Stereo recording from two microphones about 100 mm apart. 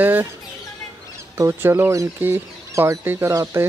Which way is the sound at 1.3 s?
25° right (ahead or behind).